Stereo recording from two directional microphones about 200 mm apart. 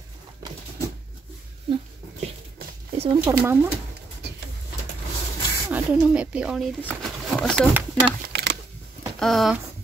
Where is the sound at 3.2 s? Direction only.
10° right (ahead or behind).